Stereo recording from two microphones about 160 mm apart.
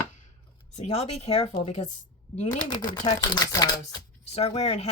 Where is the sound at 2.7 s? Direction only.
25° left (ahead or behind).